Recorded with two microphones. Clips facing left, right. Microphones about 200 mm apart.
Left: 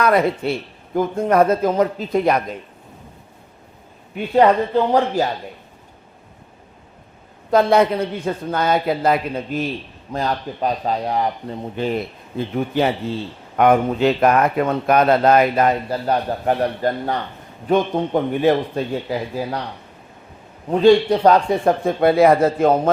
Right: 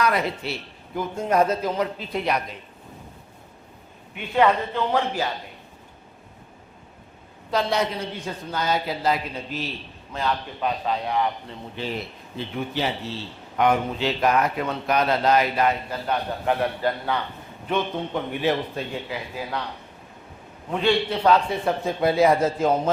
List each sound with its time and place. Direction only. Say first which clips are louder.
0.0 s speech: left 7 dB; 50° left (ahead or behind)
4.1 s speech: left 6 dB; 40° left (ahead or behind)
7.5 s a man's voice: left 9 dB; 55° left (ahead or behind)
10.1 s speech: left 4 dB; 40° left (ahead or behind)
20.7 s a man's voice: left 10 dB; 40° left (ahead or behind); by 22.9 s 55° left (ahead or behind)